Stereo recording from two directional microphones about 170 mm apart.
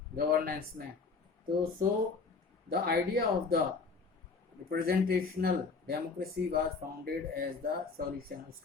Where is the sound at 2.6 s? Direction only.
65° right (ahead or behind).